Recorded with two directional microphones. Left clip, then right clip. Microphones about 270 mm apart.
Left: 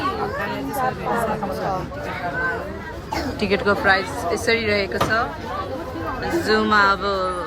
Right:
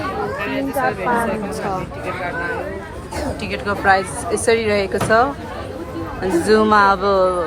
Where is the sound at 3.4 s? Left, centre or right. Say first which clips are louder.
Left 9 dB; centre.